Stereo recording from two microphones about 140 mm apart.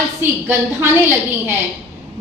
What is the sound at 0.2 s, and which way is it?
A woman's voice, 15° right (ahead or behind).